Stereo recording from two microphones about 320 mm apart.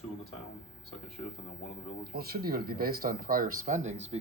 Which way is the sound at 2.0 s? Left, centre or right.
Right.